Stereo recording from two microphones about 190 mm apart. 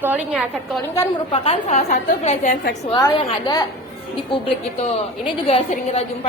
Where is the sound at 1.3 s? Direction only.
35° left (ahead or behind).